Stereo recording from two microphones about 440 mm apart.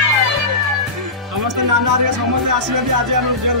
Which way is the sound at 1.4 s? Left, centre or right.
Right.